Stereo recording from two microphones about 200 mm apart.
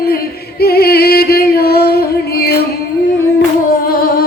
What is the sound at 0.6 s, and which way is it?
Music, 50° left (ahead or behind).